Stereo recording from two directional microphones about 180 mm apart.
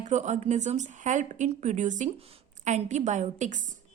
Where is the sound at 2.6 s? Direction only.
40° right (ahead or behind).